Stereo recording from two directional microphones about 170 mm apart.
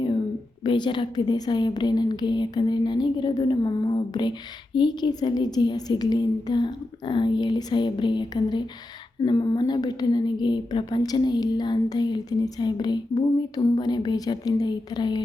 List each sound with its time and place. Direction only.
0.6 s a woman's voice: 30° left (ahead or behind)